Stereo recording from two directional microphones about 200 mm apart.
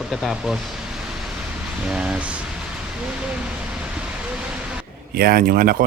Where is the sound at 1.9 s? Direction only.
5° right (ahead or behind).